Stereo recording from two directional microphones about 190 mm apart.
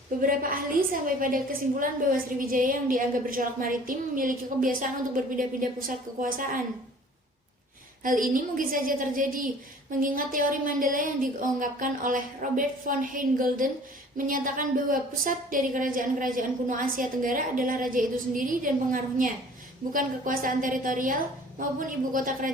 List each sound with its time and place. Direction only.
0.2 s a woman's voice: 50° right (ahead or behind)
8.0 s a woman's voice: 45° right (ahead or behind)